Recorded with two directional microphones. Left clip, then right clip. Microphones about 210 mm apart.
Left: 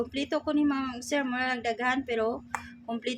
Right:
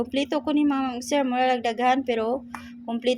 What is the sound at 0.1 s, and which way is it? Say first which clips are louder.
A woman's voice: right 5 dB; 25° right (ahead or behind).